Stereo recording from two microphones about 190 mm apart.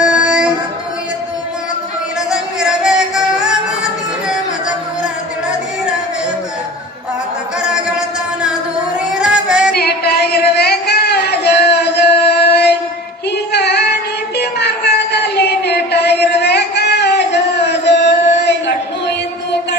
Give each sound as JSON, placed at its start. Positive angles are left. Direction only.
{"t": 0.0, "sound": "child singing", "side_deg": -5}
{"t": 2.3, "sound": "music", "side_deg": -5}
{"t": 7.6, "sound": "music", "side_deg": -5}
{"t": 9.7, "sound": "a sound", "side_deg": 55}
{"t": 13.5, "sound": "child singing", "side_deg": 60}